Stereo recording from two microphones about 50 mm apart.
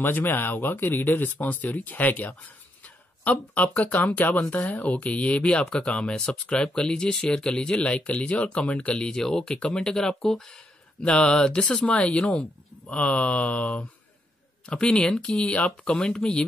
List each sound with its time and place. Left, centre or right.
0.0 s speech: left
14.7 s speech: centre
15.3 s speech: left